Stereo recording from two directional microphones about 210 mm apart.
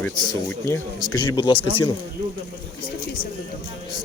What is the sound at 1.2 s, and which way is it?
Speech, 20° left (ahead or behind).